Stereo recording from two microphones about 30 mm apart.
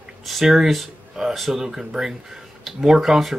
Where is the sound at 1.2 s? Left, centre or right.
Centre.